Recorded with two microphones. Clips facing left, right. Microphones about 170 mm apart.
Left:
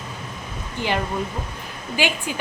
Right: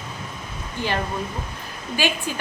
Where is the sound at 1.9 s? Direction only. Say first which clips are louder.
Even; 15° left (ahead or behind).